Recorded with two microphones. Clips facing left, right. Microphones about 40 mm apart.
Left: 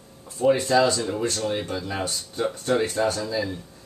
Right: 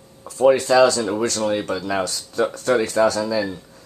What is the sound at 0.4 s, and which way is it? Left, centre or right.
Speech, right.